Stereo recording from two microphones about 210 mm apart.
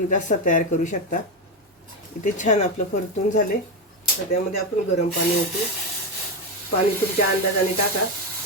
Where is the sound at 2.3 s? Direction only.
35° left (ahead or behind).